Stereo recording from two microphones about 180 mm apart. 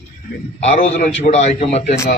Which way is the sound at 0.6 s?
35° left (ahead or behind).